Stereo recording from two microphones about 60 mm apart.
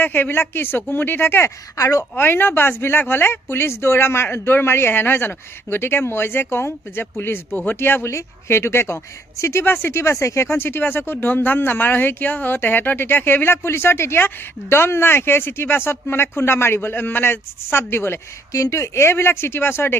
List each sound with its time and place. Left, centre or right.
0.0 s speech: left
1.7 s speech: left
2.1 s speech: left
18.5 s speech: left